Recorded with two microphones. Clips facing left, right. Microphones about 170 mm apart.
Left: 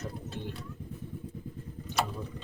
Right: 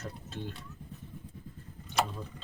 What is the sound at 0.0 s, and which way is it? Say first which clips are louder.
Clip-clop: left 2 dB; 15° left (ahead or behind).